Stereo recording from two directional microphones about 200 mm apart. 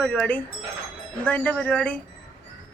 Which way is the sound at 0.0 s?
5° left (ahead or behind).